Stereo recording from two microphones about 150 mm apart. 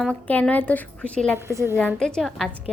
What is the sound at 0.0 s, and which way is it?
A woman's voice, 10° left (ahead or behind).